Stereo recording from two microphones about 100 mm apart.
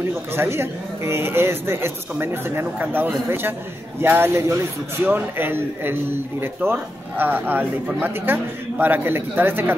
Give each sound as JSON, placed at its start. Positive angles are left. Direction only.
{"t": 0.3, "sound": "speech", "side_deg": -25}